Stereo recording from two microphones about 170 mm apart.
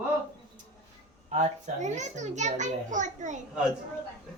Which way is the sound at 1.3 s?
45° right (ahead or behind).